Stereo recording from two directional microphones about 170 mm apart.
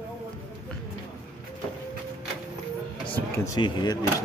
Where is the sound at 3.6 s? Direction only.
25° left (ahead or behind).